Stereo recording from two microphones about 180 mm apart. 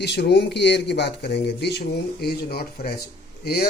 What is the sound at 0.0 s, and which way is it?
Speech, 70° left (ahead or behind).